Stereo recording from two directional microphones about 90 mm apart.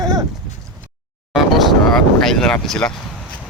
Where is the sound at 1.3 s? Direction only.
Centre (ahead or behind).